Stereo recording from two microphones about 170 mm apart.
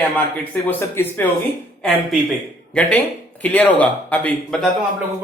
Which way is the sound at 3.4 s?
10° left (ahead or behind).